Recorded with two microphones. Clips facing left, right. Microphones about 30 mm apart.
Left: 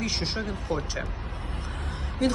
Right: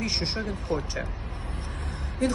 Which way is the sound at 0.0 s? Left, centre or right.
Left.